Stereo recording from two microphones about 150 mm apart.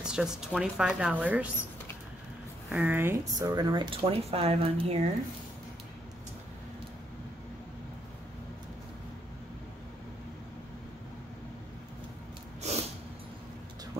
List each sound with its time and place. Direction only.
0.0 s speech: 5° right (ahead or behind)
2.7 s speech: 10° right (ahead or behind); by 5.0 s 45° right (ahead or behind)
12.6 s a sound: 45° right (ahead or behind)